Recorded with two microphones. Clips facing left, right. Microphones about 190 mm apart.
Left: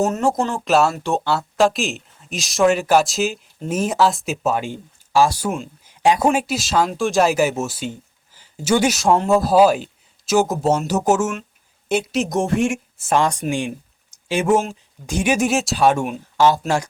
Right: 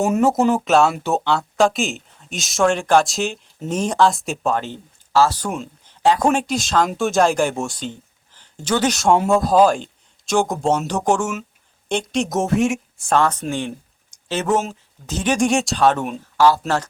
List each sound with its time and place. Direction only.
0.0 s speech: 5° right (ahead or behind)
13.1 s speech: 15° left (ahead or behind)